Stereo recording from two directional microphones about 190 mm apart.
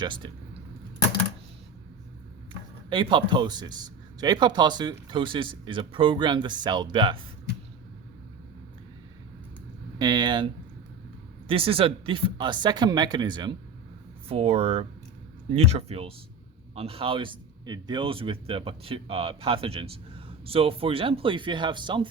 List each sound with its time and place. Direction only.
0.0 s speech: 25° right (ahead or behind)
2.9 s speech: 25° right (ahead or behind)
10.0 s speech: 20° right (ahead or behind)